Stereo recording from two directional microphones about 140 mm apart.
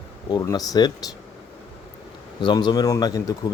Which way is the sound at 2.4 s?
30° left (ahead or behind).